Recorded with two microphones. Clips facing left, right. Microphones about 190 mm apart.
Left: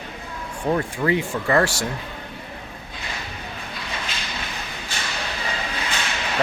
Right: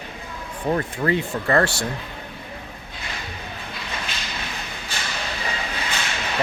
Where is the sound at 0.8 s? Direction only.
10° left (ahead or behind).